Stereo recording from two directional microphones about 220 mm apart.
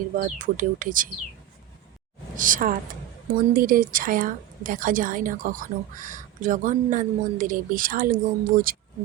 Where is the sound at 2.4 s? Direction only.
40° right (ahead or behind).